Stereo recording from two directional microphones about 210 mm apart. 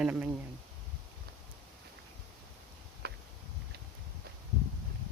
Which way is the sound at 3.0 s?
50° right (ahead or behind).